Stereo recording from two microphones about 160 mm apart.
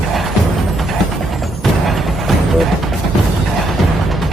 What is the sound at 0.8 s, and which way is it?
Music, centre (ahead or behind).